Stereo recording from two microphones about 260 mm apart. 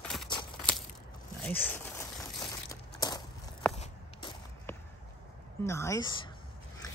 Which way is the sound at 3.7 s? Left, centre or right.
Left.